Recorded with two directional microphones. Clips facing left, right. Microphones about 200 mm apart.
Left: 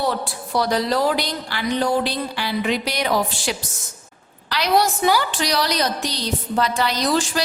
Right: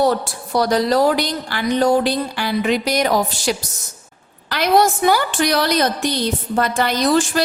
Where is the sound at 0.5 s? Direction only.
45° right (ahead or behind).